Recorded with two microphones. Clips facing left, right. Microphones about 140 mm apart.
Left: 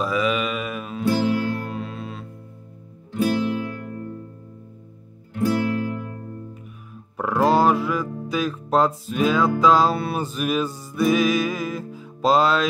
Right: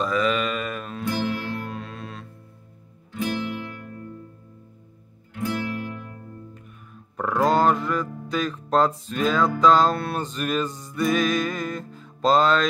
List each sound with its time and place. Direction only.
0.0 s music: 5° left (ahead or behind)
3.2 s music: 40° left (ahead or behind)
5.4 s music: 35° left (ahead or behind)
7.2 s speech: 5° left (ahead or behind)